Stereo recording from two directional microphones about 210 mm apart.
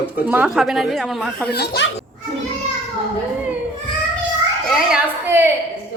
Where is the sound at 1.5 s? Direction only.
50° left (ahead or behind).